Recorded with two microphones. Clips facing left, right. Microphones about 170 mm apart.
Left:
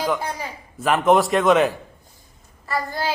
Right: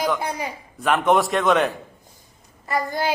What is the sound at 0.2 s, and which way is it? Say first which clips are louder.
Speech: right 2 dB; 15° right (ahead or behind).